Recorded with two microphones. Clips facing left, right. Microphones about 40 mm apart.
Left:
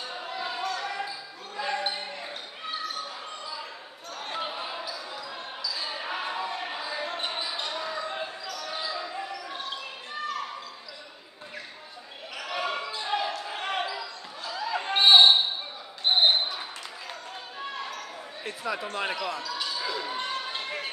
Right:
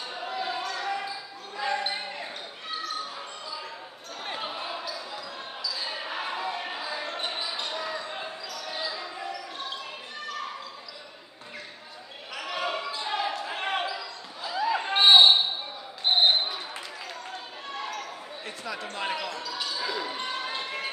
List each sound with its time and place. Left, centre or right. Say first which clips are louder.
0.3 s basketball bounce: even; centre
4.2 s basketball bounce: left 1 dB; centre
12.4 s basketball bounce: even; centre
18.4 s a sound: left 5 dB; centre
19.2 s basketball bounce: left 1 dB; centre